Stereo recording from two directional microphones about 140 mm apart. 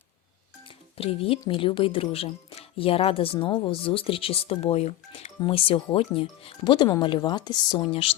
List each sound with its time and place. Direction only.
0.6 s speech: 40° left (ahead or behind)